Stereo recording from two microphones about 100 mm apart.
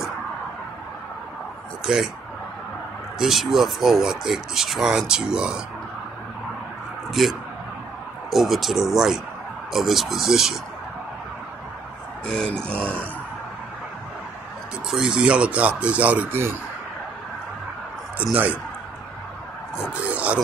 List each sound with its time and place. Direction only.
3.2 s speech: centre (ahead or behind)
7.2 s speech: centre (ahead or behind)
12.4 s speech: 10° left (ahead or behind)
14.9 s speech: 5° right (ahead or behind); by 16.5 s 20° right (ahead or behind)
18.3 s speech: 15° right (ahead or behind)
19.9 s a sound: 15° right (ahead or behind)